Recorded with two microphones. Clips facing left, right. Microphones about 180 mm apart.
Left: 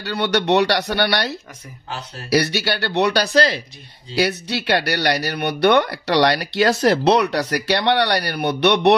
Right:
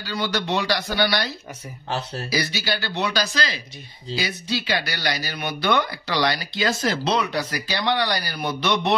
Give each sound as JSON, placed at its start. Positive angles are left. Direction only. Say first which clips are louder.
{"t": 0.0, "sound": "speech", "louder": "left 6 dB", "side_deg": 65}